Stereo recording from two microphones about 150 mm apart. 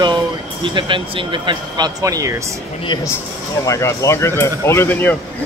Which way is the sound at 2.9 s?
30° left (ahead or behind).